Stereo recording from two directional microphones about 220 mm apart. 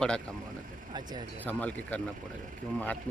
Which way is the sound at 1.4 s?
5° left (ahead or behind).